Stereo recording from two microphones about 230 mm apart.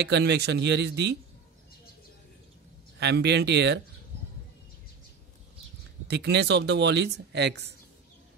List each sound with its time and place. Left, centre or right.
0.0 s speech: right
3.0 s speech: right
6.0 s speech: right